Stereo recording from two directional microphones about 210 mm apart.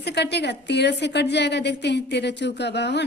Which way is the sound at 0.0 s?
55° left (ahead or behind).